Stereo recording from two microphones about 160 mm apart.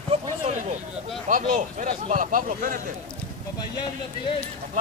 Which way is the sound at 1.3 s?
55° right (ahead or behind).